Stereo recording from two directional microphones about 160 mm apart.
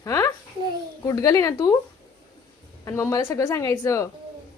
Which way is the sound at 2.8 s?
20° left (ahead or behind).